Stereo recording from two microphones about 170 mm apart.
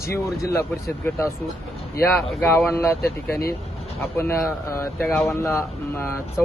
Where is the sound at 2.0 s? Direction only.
15° left (ahead or behind).